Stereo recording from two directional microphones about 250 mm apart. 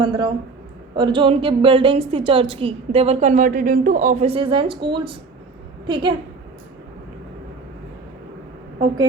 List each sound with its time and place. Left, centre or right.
0.0 s a woman's voice: centre